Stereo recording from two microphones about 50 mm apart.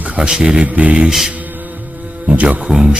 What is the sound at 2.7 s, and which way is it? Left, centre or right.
Speech, centre.